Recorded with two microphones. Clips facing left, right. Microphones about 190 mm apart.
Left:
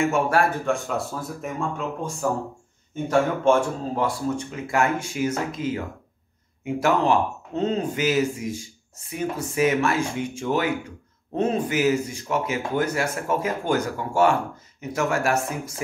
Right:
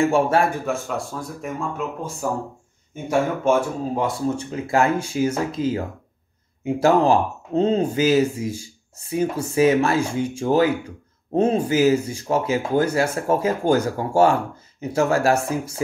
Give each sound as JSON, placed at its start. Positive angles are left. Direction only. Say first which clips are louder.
{"t": 0.0, "sound": "speech", "louder": "right 4 dB", "side_deg": -30}
{"t": 0.7, "sound": "speech", "louder": "left 1 dB", "side_deg": 0}
{"t": 4.0, "sound": "speech", "louder": "right 1 dB", "side_deg": -30}